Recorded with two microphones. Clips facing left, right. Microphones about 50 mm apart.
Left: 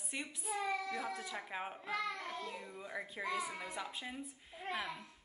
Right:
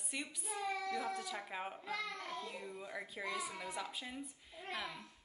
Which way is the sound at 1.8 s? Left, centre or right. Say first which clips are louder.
Left 3 dB; left.